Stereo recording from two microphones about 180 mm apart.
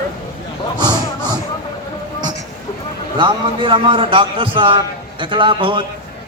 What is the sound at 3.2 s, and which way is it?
A man's voice, 25° right (ahead or behind).